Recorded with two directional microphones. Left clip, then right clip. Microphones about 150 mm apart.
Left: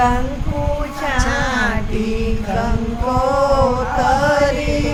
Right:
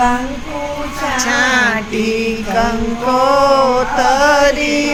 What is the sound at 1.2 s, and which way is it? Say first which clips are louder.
Chant: right 7 dB; 25° right (ahead or behind).